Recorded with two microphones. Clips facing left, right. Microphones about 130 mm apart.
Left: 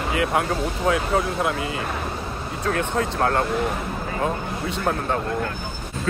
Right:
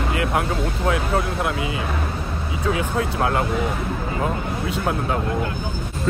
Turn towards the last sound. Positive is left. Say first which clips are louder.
# right 1 dB
turn(degrees=0)  # may be behind; listen again after turning